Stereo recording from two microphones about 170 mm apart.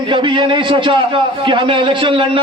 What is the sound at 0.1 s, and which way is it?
A man's voice, 30° right (ahead or behind).